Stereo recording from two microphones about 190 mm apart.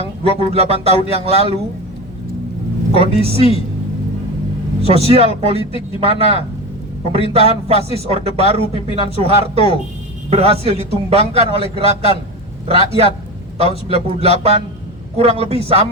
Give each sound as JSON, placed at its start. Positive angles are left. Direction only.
{"t": 0.2, "sound": "a man's voice", "side_deg": -30}
{"t": 3.2, "sound": "a man's voice", "side_deg": -30}
{"t": 4.8, "sound": "a man's voice", "side_deg": -30}